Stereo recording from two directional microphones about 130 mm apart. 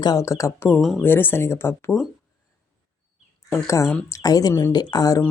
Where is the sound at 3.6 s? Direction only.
25° left (ahead or behind).